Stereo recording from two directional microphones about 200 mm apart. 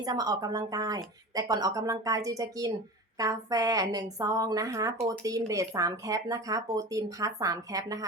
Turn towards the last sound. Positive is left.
turn(degrees=-15)  # may be behind; listen again after turning